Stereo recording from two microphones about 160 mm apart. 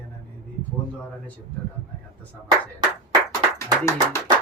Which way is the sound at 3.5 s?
20° left (ahead or behind).